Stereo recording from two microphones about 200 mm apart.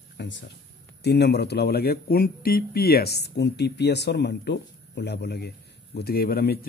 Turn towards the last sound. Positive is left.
turn(degrees=50)  # may be behind; listen again after turning